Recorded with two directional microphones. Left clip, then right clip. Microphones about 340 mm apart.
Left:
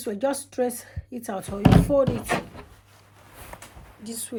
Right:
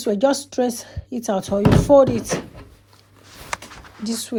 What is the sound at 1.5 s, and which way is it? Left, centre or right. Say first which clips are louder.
Speech: right 13 dB; right.